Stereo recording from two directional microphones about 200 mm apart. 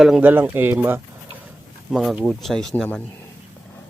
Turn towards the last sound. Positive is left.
turn(degrees=5)  # may be behind; listen again after turning